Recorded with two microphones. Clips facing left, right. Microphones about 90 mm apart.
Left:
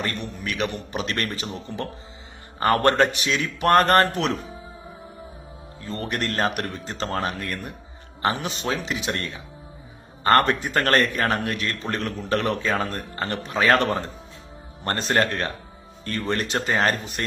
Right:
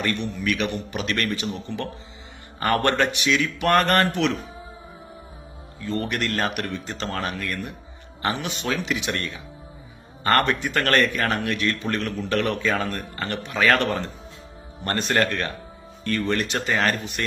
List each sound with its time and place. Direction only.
0.3 s speech: 35° left (ahead or behind)
5.8 s speech: 35° left (ahead or behind)